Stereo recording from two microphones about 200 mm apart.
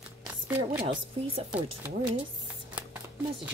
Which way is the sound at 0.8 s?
30° right (ahead or behind).